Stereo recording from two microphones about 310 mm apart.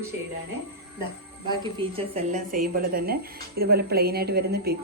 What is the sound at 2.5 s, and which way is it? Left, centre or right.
A woman's voice, right.